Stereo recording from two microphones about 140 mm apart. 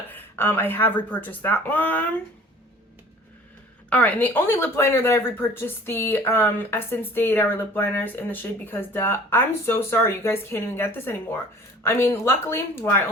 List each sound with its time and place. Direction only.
0.1 s speech: 15° left (ahead or behind)
3.8 s speech: 10° left (ahead or behind)